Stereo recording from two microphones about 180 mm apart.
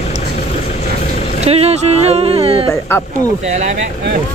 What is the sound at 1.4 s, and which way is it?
Speech, 35° right (ahead or behind).